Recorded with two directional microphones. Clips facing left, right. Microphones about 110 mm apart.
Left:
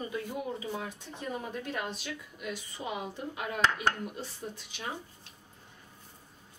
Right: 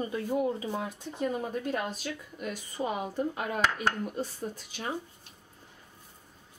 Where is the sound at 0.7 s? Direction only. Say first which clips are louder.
Right 3 dB; 40° right (ahead or behind).